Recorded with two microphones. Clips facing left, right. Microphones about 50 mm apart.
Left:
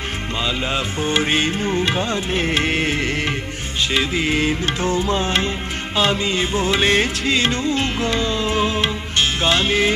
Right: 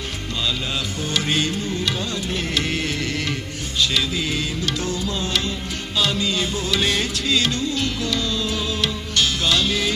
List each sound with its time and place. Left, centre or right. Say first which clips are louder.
0.4 s music: left 3 dB; left